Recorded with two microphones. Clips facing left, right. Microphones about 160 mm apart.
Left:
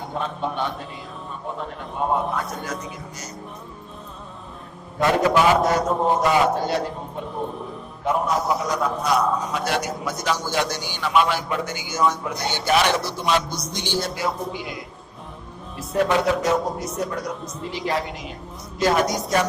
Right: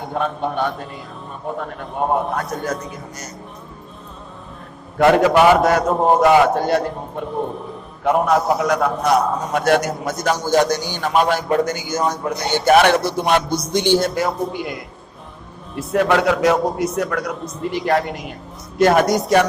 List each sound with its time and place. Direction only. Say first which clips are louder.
0.1 s a man's voice: right 6 dB; 50° right (ahead or behind)
2.3 s a man's voice: right 5 dB; 45° right (ahead or behind)
4.9 s a man's voice: right 6 dB; 65° right (ahead or behind)
15.7 s a man's voice: right 4 dB; 70° right (ahead or behind)
17.6 s a woman's voice: right 7 dB; 55° right (ahead or behind)